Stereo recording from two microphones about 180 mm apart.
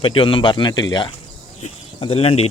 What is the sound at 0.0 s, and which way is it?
Speech, 30° left (ahead or behind).